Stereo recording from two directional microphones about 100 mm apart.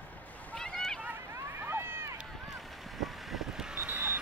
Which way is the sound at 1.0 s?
20° right (ahead or behind).